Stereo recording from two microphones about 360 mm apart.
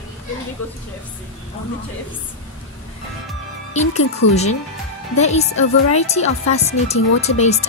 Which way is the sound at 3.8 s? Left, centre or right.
Centre.